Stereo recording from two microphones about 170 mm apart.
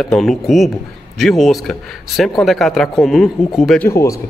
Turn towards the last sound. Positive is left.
turn(degrees=15)  # may be behind; listen again after turning